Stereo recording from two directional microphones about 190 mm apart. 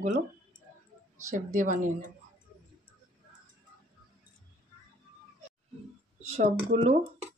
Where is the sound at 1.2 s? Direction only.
40° right (ahead or behind).